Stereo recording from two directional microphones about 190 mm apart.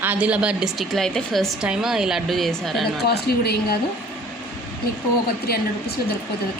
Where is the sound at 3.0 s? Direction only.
55° left (ahead or behind).